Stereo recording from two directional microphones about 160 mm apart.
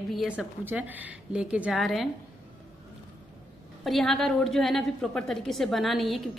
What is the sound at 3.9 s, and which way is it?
A woman's voice, centre (ahead or behind).